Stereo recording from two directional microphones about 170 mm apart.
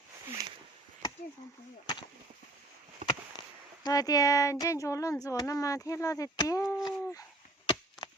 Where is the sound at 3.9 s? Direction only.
20° left (ahead or behind).